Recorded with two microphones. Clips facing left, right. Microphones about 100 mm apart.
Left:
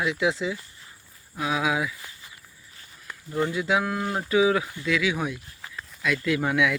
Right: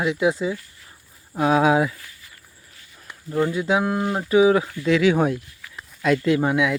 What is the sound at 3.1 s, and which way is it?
Speech, 30° right (ahead or behind).